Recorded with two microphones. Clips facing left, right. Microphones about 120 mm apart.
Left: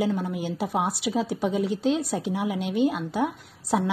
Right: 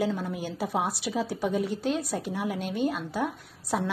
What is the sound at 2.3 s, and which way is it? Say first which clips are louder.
A woman's voice: left 5 dB; 5° left (ahead or behind).